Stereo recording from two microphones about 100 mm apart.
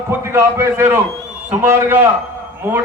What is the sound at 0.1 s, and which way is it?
A man's voice, 25° right (ahead or behind).